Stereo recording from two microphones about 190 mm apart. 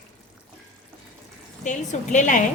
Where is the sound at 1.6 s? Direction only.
40° left (ahead or behind).